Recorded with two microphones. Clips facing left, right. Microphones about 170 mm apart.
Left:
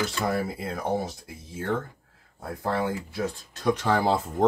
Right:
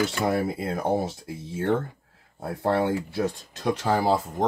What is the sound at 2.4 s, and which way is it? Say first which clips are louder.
Speech: right 4 dB; 30° right (ahead or behind).